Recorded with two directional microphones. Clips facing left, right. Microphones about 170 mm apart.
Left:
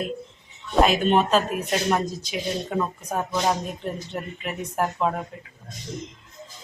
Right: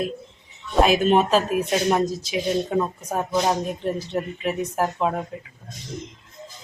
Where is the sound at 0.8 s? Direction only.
5° right (ahead or behind).